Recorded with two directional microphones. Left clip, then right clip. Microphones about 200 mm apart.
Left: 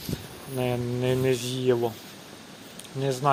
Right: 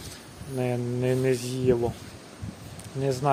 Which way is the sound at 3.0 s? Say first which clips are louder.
Left 1 dB; 10° right (ahead or behind).